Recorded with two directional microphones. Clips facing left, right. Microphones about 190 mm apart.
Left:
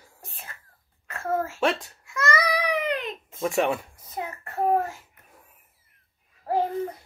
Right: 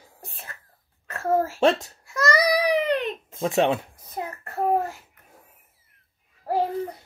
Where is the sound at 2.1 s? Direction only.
35° right (ahead or behind).